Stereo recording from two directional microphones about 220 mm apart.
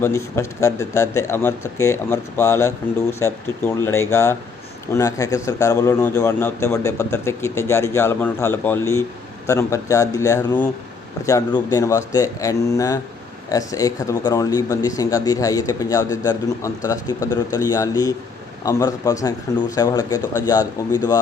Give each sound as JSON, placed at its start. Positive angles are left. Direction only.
{"t": 0.0, "sound": "speech", "side_deg": 10}